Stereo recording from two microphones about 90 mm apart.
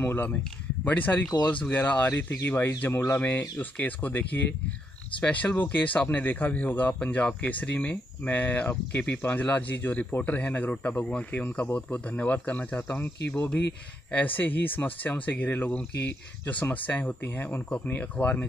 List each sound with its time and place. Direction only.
0.0 s speech: 20° left (ahead or behind)
14.1 s speech: 20° left (ahead or behind)